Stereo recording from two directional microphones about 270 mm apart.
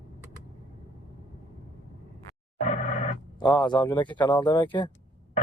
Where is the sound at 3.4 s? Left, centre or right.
Centre.